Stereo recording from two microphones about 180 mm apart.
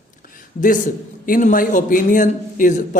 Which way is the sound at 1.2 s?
50° left (ahead or behind).